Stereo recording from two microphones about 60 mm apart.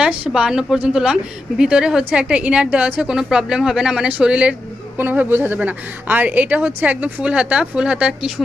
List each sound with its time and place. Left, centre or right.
0.0 s a woman's voice: centre
4.9 s a woman's voice: right